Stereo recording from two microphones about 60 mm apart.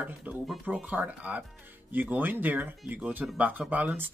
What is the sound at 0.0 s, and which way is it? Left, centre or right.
Speech, right.